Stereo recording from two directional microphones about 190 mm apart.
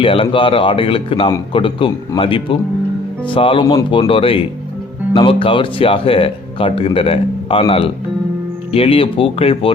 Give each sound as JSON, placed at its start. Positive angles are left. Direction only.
{"t": 0.0, "sound": "speech", "side_deg": 30}